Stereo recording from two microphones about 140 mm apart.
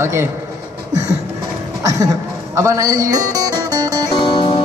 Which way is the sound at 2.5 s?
25° right (ahead or behind).